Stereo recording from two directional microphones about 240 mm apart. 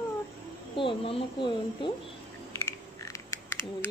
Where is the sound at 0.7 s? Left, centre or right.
Left.